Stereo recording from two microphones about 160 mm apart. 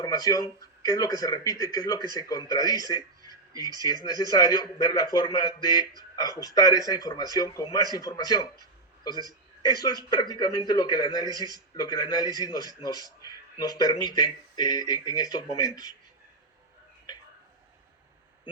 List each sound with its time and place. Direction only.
0.0 s a man's voice: 25° left (ahead or behind)
4.0 s a man's voice: 25° left (ahead or behind)
10.1 s a man's voice: 25° left (ahead or behind)